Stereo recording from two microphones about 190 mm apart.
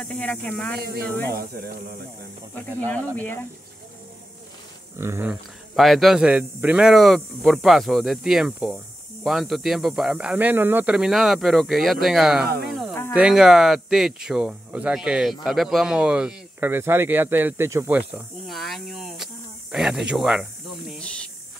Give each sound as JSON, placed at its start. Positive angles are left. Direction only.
{"t": 0.1, "sound": "speech", "side_deg": 5}
{"t": 0.7, "sound": "speech", "side_deg": -55}
{"t": 4.9, "sound": "speech", "side_deg": -15}
{"t": 5.3, "sound": "speech", "side_deg": 0}